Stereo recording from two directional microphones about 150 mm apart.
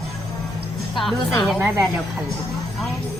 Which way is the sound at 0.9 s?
Centre (ahead or behind).